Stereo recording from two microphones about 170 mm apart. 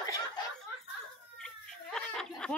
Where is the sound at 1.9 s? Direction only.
5° left (ahead or behind).